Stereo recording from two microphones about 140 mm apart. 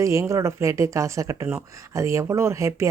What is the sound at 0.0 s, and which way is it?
Speech, 20° right (ahead or behind).